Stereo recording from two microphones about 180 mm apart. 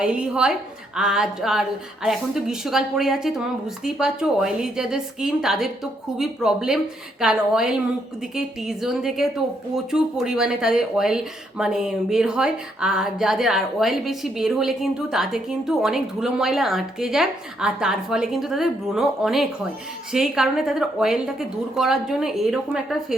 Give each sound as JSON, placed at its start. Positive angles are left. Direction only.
{"t": 0.0, "sound": "speech", "side_deg": -5}